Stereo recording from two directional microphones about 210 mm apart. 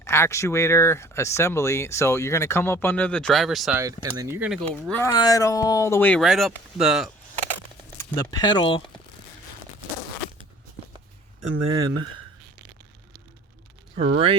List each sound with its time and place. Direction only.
0.0 s speech: 10° left (ahead or behind)
3.8 s speech: 15° right (ahead or behind)
4.9 s speech: 10° left (ahead or behind)
8.1 s speech: 20° left (ahead or behind)
11.5 s speech: 75° right (ahead or behind)